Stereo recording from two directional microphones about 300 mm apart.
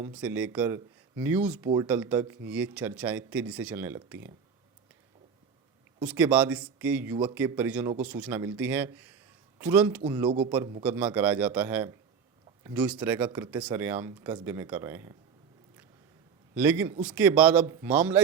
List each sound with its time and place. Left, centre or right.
0.0 s speech: centre
6.0 s speech: centre
10.2 s speech: centre
10.8 s speech: centre
16.6 s speech: centre